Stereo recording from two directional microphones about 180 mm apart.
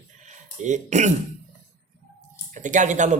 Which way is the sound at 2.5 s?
45° right (ahead or behind).